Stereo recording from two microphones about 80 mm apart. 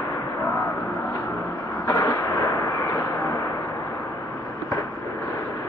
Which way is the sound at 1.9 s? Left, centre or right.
Left.